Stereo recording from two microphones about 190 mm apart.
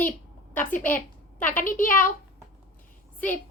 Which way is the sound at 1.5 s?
45° left (ahead or behind).